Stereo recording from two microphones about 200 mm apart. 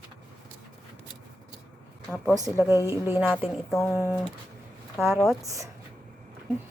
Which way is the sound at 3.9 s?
15° right (ahead or behind).